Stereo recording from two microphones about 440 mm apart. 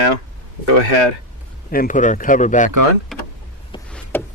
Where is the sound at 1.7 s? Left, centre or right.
Centre.